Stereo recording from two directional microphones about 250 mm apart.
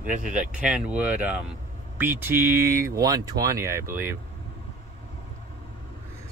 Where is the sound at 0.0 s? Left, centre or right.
Right.